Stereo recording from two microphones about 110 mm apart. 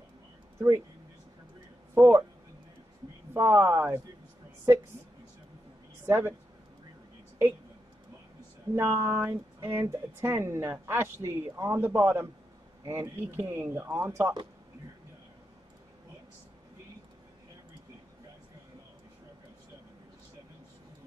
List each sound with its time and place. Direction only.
2.0 s a woman's voice: 25° right (ahead or behind)
3.3 s a woman's voice: 20° right (ahead or behind)
6.0 s a man's voice: 20° right (ahead or behind)
8.7 s a woman's voice: 20° right (ahead or behind)